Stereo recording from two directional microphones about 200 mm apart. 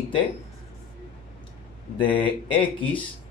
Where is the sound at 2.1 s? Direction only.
25° left (ahead or behind).